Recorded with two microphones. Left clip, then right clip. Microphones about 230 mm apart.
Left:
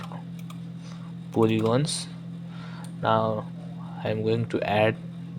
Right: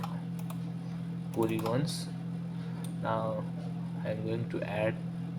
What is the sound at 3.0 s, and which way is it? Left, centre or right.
Speech, left.